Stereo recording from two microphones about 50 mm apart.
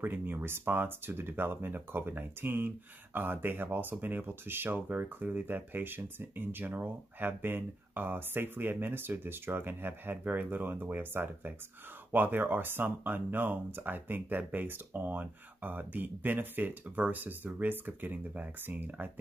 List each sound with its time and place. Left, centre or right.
0.0 s speech: right
10.2 s speech: right